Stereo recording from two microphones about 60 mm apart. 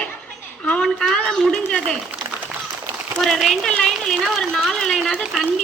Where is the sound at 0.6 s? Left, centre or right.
Centre.